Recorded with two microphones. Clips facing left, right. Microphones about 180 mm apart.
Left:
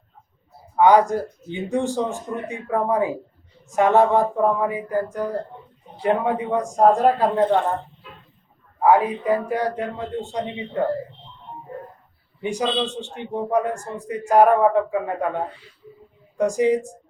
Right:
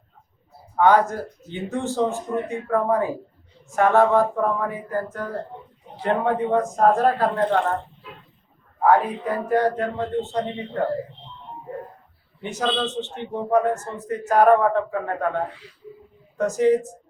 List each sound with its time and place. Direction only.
0.8 s a man's voice: 15° left (ahead or behind)
8.8 s a man's voice: 10° left (ahead or behind)
12.4 s a man's voice: 15° left (ahead or behind)
16.4 s a man's voice: 15° left (ahead or behind)